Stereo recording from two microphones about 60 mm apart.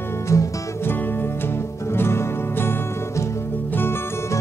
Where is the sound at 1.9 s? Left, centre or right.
Left.